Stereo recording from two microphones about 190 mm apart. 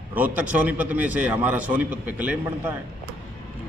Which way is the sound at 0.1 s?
10° right (ahead or behind).